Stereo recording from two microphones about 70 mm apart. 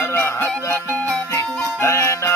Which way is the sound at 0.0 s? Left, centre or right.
Left.